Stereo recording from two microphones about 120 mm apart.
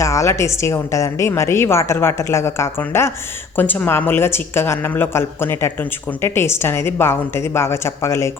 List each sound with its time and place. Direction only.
0.0 s a woman's voice: 25° left (ahead or behind)